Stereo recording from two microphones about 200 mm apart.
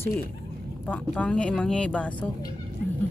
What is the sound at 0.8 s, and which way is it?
Speech, 5° left (ahead or behind).